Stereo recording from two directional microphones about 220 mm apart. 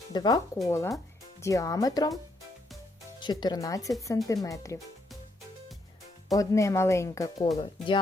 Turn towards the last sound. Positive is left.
turn(degrees=20)  # may be behind; listen again after turning